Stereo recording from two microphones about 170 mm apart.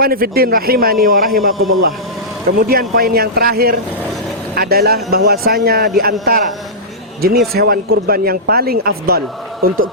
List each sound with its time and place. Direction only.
0.0 s speech: 60° right (ahead or behind)
7.2 s speech: 65° right (ahead or behind)